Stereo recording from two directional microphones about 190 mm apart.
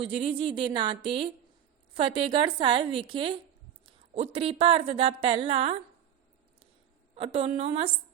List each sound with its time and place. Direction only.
0.0 s a woman's voice: 30° right (ahead or behind)
7.2 s a woman's voice: 30° right (ahead or behind)